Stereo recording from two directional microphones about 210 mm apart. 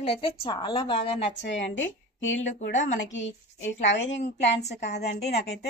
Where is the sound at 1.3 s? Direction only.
60° left (ahead or behind).